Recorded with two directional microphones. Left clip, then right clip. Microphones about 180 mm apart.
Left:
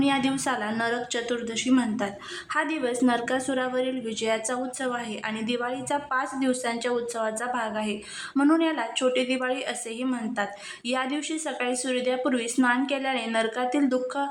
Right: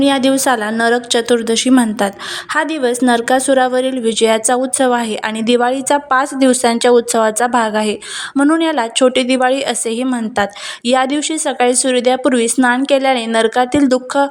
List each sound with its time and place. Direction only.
0.0 s a woman's voice: 35° right (ahead or behind)